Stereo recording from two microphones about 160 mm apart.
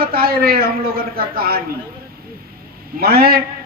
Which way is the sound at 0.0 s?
70° right (ahead or behind).